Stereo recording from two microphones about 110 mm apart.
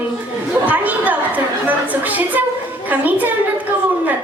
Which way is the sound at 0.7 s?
15° right (ahead or behind).